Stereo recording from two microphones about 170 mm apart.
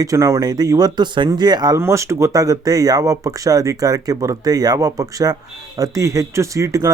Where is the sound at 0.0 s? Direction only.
20° right (ahead or behind).